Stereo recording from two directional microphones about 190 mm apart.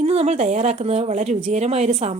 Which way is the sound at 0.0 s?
35° right (ahead or behind).